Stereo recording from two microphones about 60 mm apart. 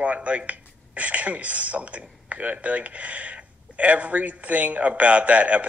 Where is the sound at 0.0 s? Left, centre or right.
Right.